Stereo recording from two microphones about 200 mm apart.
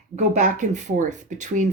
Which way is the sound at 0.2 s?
40° right (ahead or behind).